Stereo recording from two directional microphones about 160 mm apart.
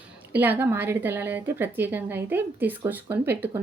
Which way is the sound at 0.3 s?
10° right (ahead or behind).